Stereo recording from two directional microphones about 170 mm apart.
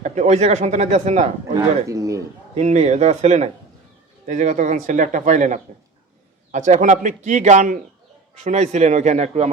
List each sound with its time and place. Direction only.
0.0 s speech: 40° right (ahead or behind)
1.5 s speech: 20° right (ahead or behind)
2.6 s speech: 40° right (ahead or behind)